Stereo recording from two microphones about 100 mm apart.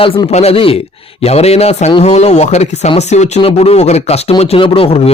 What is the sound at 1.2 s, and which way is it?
Speech, 90° left.